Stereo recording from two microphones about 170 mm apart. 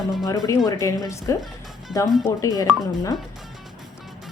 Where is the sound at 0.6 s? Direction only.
20° left (ahead or behind).